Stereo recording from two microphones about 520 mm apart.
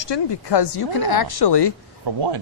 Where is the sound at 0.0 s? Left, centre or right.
Left.